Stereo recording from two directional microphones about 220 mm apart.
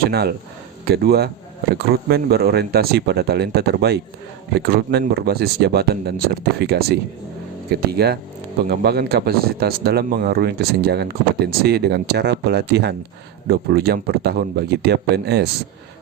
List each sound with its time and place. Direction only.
0.1 s speech: 45° right (ahead or behind)